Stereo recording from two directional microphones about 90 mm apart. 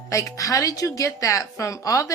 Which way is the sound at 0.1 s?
40° left (ahead or behind).